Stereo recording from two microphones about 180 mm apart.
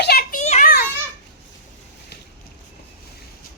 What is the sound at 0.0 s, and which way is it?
Children playing, 60° left (ahead or behind).